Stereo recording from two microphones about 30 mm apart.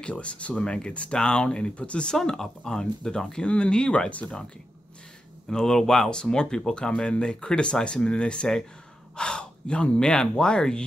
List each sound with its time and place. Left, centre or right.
0.0 s speech: left
2.1 s speech: centre
3.4 s speech: left
5.5 s speech: centre